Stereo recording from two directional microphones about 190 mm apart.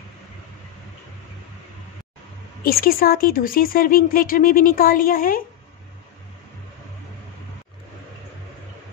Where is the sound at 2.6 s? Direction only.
50° left (ahead or behind).